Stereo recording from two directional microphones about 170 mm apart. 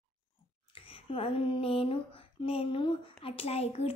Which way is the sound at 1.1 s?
35° left (ahead or behind).